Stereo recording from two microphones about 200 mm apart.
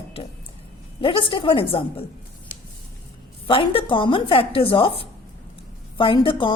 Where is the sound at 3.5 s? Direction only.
25° left (ahead or behind).